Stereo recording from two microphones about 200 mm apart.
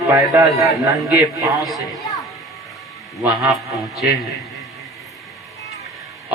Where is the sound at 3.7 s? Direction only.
Centre (ahead or behind).